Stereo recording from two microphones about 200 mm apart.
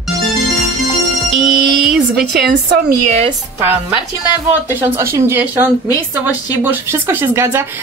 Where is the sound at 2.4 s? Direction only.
55° right (ahead or behind).